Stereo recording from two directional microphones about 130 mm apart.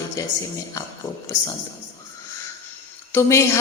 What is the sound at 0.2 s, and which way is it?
Speech, 25° left (ahead or behind).